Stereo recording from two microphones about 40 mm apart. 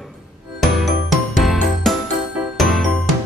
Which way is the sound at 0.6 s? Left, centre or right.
Centre.